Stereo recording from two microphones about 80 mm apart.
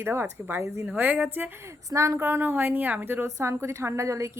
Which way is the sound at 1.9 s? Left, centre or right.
Right.